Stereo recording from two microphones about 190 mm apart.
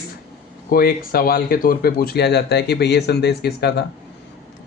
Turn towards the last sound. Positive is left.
turn(degrees=60)  # may be behind; listen again after turning